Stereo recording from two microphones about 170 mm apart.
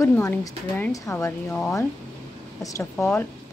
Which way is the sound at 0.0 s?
15° left (ahead or behind).